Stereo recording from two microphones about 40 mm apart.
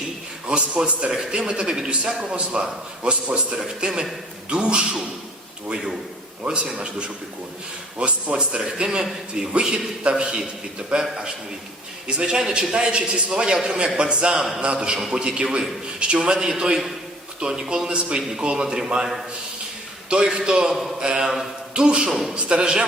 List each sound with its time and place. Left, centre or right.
0.4 s a man's voice: right
1.1 s a man's voice: centre
6.4 s a man's voice: right
7.9 s a man's voice: right
20.4 s a man's voice: centre
22.1 s a man's voice: centre
22.4 s a man's voice: right